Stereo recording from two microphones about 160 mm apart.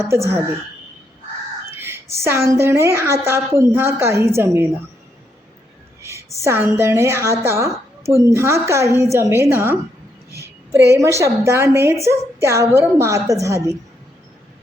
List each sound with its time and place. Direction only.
0.0 s a woman's voice: 15° right (ahead or behind)
1.7 s a woman's voice: 15° right (ahead or behind)
6.0 s a sound: 15° right (ahead or behind)
6.4 s a woman's voice: 15° right (ahead or behind)
10.9 s a woman's voice: 20° right (ahead or behind)